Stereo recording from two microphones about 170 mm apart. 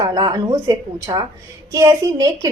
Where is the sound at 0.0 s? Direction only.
20° right (ahead or behind).